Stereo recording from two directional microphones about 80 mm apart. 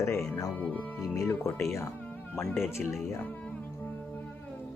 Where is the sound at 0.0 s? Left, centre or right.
Left.